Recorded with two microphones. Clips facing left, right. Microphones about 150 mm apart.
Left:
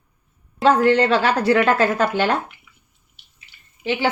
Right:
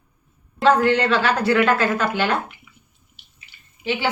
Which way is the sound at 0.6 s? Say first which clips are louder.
Left 1 dB; 45° left (ahead or behind).